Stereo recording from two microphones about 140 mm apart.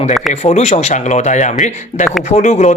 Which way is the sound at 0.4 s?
50° left (ahead or behind).